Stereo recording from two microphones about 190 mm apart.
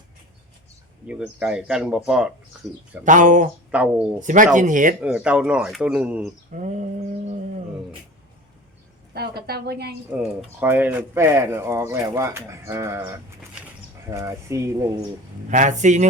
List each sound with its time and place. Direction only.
1.0 s speech: 5° right (ahead or behind)
3.0 s mantra: 40° right (ahead or behind)
3.7 s speech: 5° right (ahead or behind)
4.2 s mantra: 40° right (ahead or behind)
4.5 s speech: 45° right (ahead or behind)
4.9 s speech: 5° right (ahead or behind)
6.5 s mantra: 40° right (ahead or behind)
9.1 s a woman's voice: 55° right (ahead or behind)
10.6 s speech: 10° right (ahead or behind)
15.4 s mantra: 40° right (ahead or behind)